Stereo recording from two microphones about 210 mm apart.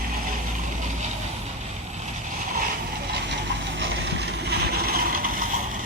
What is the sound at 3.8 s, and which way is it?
Vehicle, 50° right (ahead or behind).